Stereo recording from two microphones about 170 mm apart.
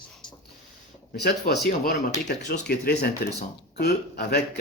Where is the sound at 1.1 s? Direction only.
75° left (ahead or behind).